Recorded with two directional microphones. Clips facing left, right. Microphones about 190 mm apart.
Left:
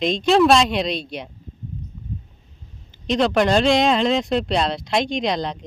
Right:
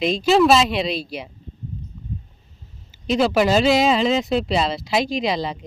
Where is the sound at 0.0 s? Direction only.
5° right (ahead or behind).